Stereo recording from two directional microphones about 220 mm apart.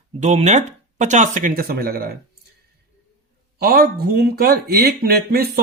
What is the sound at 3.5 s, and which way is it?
Speech, 45° right (ahead or behind).